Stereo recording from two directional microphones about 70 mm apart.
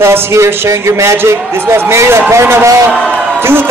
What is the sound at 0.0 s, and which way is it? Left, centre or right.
A man's voice, right.